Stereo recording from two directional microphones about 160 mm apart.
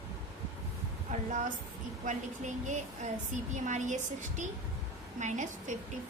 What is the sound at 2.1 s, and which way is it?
A woman's voice, 50° right (ahead or behind).